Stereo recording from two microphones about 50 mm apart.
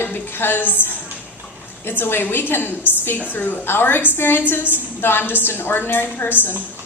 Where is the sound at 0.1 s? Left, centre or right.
Left.